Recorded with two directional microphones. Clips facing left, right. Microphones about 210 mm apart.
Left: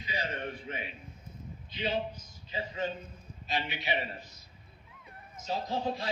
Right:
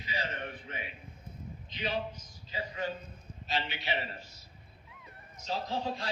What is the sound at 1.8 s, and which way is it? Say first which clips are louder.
A man's voice: left 2 dB; 25° left (ahead or behind).